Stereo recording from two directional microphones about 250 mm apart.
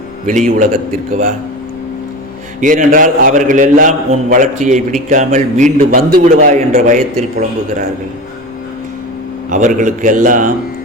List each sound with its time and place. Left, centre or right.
0.3 s a man's voice: right
2.6 s a man's voice: right
9.5 s a man's voice: right